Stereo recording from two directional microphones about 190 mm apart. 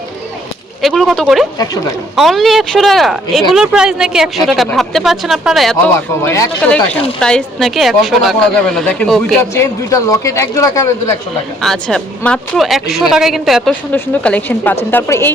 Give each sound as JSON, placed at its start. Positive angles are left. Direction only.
{"t": 0.8, "sound": "speech", "side_deg": 0}
{"t": 1.5, "sound": "speech", "side_deg": 20}
{"t": 2.1, "sound": "speech", "side_deg": 0}
{"t": 6.2, "sound": "a man's voice", "side_deg": 15}
{"t": 6.6, "sound": "speech", "side_deg": 5}
{"t": 9.6, "sound": "a man's voice", "side_deg": 15}
{"t": 11.6, "sound": "a man's voice", "side_deg": 5}